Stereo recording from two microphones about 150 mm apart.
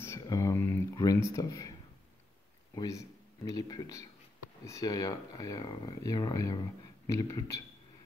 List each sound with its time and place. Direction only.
0.0 s speech: 20° left (ahead or behind)
2.7 s speech: 20° left (ahead or behind)